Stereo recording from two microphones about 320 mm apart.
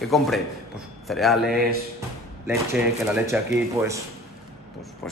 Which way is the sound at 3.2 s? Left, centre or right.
Centre.